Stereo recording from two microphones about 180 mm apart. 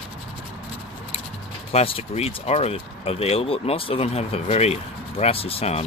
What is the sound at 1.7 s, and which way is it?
Speech, 35° left (ahead or behind).